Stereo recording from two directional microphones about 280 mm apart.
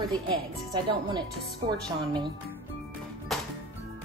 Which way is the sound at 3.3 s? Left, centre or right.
Centre.